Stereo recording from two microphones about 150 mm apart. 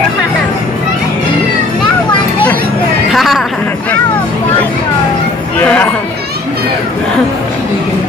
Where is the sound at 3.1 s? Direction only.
Centre (ahead or behind).